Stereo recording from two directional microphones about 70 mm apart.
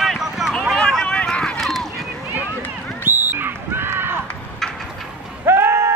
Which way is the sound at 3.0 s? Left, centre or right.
Right.